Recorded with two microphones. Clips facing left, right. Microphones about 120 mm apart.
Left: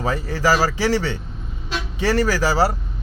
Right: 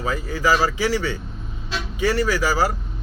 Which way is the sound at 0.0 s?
35° left (ahead or behind).